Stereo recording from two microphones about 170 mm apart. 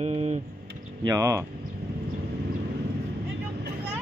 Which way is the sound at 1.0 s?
20° right (ahead or behind).